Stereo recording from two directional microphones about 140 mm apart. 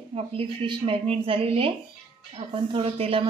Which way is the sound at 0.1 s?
40° right (ahead or behind).